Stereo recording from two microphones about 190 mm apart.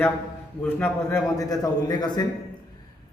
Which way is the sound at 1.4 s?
20° left (ahead or behind).